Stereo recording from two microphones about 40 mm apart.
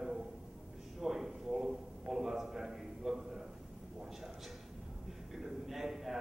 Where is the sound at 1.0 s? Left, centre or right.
Centre.